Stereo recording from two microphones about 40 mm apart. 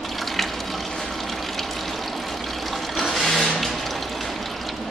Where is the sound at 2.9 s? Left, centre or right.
Centre.